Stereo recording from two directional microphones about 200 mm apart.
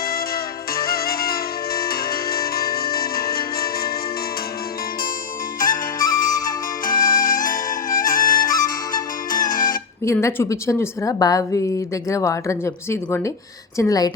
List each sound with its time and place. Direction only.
0.7 s music: 50° left (ahead or behind)
5.5 s flute: 45° left (ahead or behind)
8.6 s music: 45° left (ahead or behind)
10.0 s a woman's voice: 15° left (ahead or behind)